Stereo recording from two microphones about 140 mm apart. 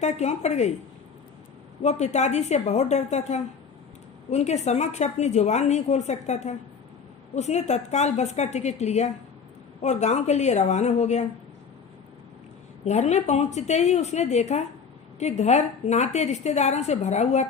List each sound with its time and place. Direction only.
0.0 s a woman's voice: 55° left (ahead or behind)
1.8 s a woman's voice: 50° left (ahead or behind)
12.8 s a woman's voice: 55° left (ahead or behind)